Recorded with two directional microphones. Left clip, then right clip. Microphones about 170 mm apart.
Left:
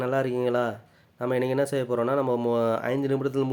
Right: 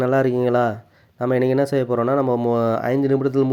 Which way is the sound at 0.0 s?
35° right (ahead or behind).